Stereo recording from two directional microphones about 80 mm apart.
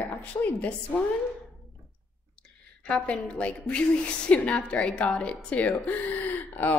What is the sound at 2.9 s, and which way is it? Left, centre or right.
A woman's voice, centre.